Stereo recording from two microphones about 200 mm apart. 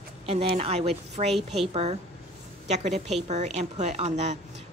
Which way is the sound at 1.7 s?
30° right (ahead or behind).